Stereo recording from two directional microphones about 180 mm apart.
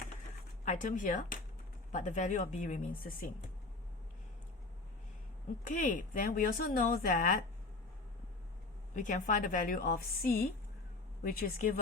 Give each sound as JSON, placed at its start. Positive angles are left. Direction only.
{"t": 0.6, "sound": "speech", "side_deg": 45}
{"t": 5.6, "sound": "speech", "side_deg": 45}
{"t": 9.0, "sound": "speech", "side_deg": 45}